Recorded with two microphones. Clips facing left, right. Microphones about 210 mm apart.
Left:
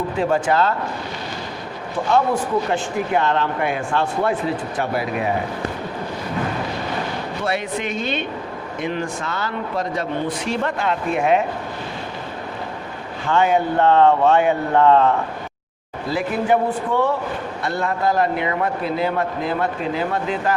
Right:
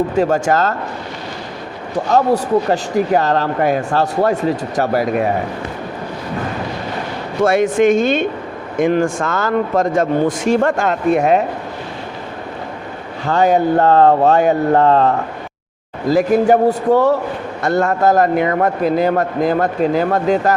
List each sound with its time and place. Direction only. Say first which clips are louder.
0.1 s a man's voice: right 4 dB; 45° right (ahead or behind)
2.0 s speech: right 4 dB; 40° right (ahead or behind)
7.4 s a man's voice: right 13 dB; 45° right (ahead or behind)
13.2 s a man's voice: right 4 dB; 40° right (ahead or behind)